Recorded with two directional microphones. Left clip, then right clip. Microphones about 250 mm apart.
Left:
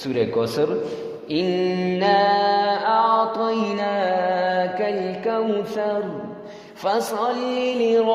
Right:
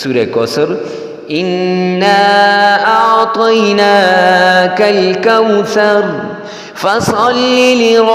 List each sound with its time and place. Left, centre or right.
0.1 s mantra: right